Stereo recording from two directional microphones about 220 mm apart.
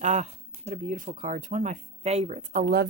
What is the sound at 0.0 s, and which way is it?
Speech, 35° right (ahead or behind).